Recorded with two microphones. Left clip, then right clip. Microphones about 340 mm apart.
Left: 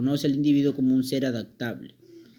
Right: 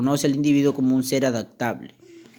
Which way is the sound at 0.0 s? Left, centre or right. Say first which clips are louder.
Right 3 dB; right.